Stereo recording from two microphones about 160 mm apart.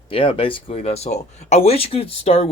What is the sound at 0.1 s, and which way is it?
Speech, 35° left (ahead or behind).